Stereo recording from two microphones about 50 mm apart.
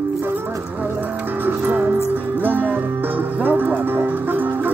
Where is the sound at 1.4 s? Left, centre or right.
Right.